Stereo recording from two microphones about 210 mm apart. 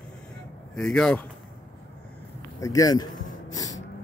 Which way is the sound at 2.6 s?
15° left (ahead or behind).